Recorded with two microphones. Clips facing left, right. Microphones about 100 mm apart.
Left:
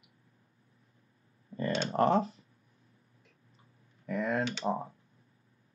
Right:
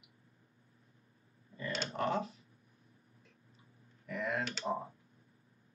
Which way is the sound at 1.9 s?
40° left (ahead or behind).